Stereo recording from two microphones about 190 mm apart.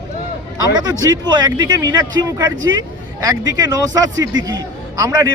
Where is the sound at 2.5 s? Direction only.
90° right.